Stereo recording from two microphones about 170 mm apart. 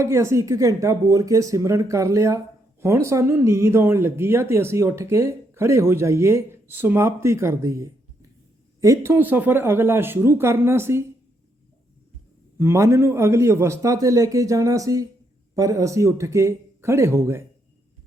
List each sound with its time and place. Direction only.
0.0 s speech: 15° right (ahead or behind)
12.5 s speech: 15° right (ahead or behind)